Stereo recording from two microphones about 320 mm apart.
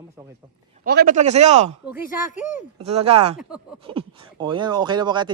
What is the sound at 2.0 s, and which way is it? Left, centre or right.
Speech, left.